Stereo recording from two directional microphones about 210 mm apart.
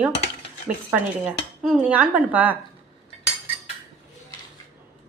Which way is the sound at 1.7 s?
5° right (ahead or behind).